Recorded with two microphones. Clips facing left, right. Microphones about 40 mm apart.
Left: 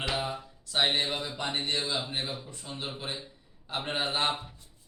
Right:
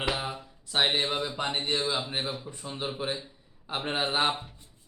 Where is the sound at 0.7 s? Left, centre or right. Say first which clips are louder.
Right 1 dB; centre.